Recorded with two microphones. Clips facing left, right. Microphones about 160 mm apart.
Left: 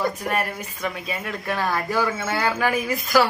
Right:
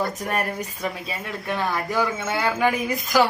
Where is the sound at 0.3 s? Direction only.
40° right (ahead or behind).